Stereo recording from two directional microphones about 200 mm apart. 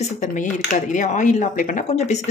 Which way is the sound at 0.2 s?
40° left (ahead or behind).